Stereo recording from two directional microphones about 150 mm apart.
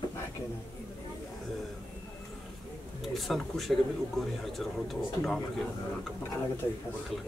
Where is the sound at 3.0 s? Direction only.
Centre (ahead or behind).